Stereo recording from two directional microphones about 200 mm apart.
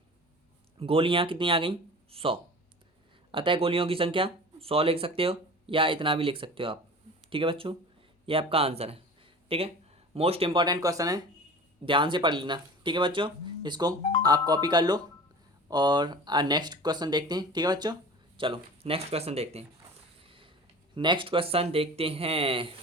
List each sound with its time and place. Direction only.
0.8 s speech: 25° right (ahead or behind)
20.2 s a sound: 25° right (ahead or behind)
20.9 s speech: 25° right (ahead or behind)